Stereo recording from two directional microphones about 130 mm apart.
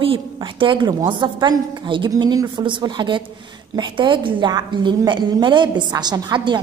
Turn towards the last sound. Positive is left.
turn(degrees=-35)  # may be behind; listen again after turning